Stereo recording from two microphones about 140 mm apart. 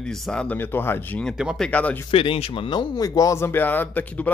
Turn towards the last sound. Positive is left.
turn(degrees=10)  # may be behind; listen again after turning